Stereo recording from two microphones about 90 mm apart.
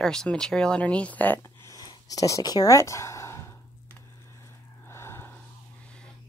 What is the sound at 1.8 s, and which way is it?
Speech, 45° left (ahead or behind).